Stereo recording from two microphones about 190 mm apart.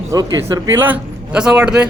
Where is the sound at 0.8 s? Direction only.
5° right (ahead or behind).